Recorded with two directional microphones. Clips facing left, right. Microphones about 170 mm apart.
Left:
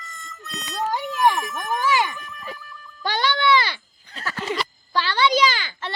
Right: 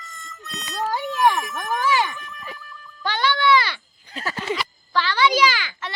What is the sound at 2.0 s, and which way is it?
Boing, centre (ahead or behind).